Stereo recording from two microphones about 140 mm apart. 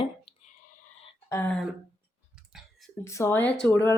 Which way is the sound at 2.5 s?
Centre (ahead or behind).